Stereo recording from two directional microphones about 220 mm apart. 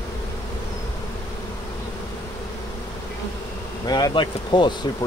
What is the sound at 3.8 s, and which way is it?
Speech, 20° left (ahead or behind).